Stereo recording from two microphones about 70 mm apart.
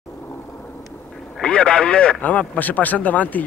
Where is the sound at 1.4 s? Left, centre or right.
Centre.